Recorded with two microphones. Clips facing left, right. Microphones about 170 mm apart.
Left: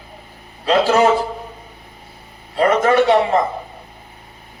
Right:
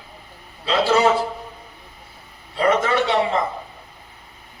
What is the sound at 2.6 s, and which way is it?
Speech, 45° left (ahead or behind).